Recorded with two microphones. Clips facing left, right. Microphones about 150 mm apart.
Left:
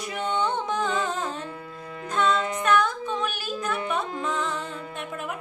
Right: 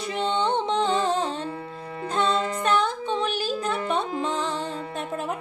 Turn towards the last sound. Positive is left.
turn(degrees=-30)  # may be behind; listen again after turning